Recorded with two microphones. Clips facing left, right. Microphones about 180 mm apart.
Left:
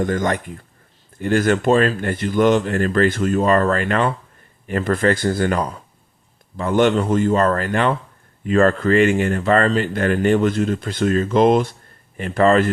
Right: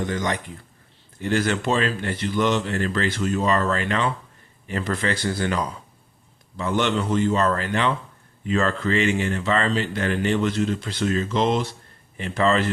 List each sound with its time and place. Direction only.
0.0 s speech: 50° left (ahead or behind)